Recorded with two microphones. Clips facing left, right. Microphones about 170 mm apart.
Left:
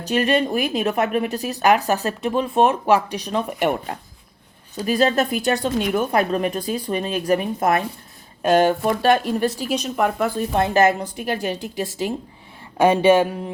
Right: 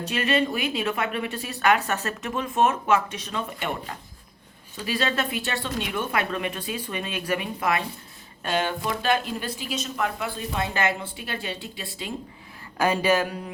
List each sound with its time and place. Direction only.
0.1 s a woman's voice: 40° left (ahead or behind)
4.8 s a woman's voice: 40° left (ahead or behind)
9.7 s a woman's voice: 60° left (ahead or behind)
12.7 s speech: 25° left (ahead or behind)